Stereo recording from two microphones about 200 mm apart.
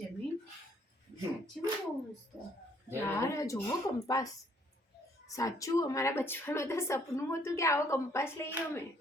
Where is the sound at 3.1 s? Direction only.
15° left (ahead or behind).